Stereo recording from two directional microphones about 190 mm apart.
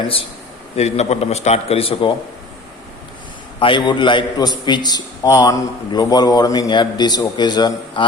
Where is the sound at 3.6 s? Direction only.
25° left (ahead or behind).